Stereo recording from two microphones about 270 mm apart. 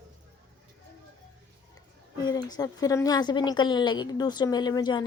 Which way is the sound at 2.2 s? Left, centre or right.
Centre.